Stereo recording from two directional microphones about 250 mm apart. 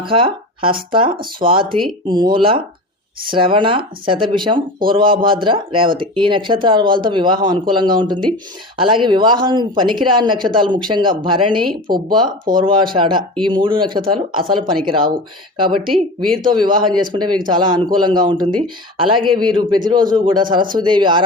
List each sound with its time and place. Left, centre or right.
0.0 s speech: centre
11.9 s speech: right
12.5 s speech: centre
14.0 s speech: right
15.9 s speech: centre
16.4 s speech: centre